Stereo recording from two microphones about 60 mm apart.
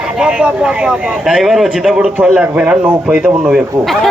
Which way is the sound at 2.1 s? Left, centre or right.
Right.